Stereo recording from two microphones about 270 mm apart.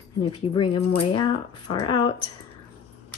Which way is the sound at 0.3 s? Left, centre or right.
Centre.